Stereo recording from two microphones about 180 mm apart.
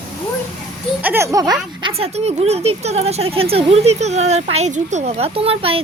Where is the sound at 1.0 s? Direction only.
15° right (ahead or behind).